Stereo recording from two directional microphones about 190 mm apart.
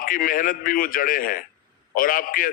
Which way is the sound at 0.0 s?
50° left (ahead or behind).